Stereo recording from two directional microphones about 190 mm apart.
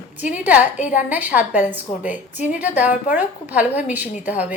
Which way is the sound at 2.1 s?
40° left (ahead or behind).